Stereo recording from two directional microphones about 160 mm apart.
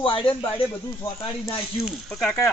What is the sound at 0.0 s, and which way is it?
Speech, 30° left (ahead or behind).